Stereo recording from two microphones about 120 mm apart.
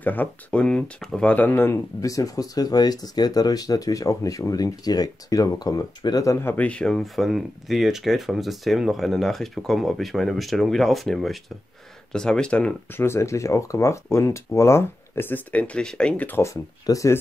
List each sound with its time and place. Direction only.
0.0 s speech: 15° left (ahead or behind); by 6.3 s 30° left (ahead or behind)
6.4 s speech: 15° left (ahead or behind)
13.0 s speech: 20° left (ahead or behind)